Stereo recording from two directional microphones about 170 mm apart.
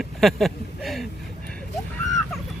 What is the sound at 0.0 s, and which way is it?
Speech, centre (ahead or behind).